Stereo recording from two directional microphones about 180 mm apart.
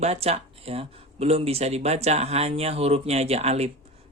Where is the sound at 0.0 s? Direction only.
35° right (ahead or behind).